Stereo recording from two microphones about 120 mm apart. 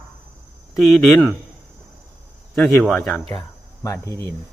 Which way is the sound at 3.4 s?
30° left (ahead or behind).